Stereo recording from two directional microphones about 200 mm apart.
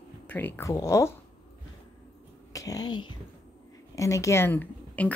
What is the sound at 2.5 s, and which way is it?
A woman's voice, 15° left (ahead or behind).